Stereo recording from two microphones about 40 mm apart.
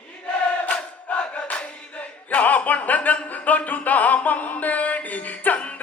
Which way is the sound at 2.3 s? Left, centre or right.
Left.